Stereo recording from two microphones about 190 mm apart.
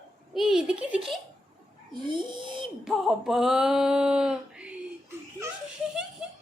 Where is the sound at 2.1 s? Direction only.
25° right (ahead or behind).